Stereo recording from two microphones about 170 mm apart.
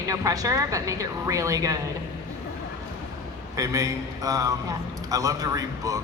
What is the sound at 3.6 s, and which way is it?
A woman's voice, 20° right (ahead or behind).